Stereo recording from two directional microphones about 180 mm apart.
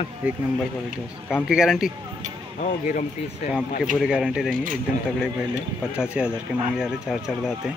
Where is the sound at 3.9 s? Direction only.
Centre (ahead or behind).